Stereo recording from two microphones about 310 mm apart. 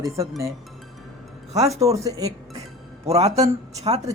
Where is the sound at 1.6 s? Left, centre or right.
Centre.